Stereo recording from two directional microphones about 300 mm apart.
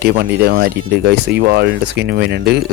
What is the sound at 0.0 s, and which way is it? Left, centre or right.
Speech, right.